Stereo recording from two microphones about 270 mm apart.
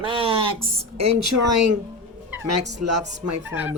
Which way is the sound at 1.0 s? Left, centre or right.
Right.